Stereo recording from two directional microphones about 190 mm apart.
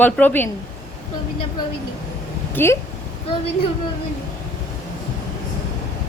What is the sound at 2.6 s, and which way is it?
Speech, 10° left (ahead or behind).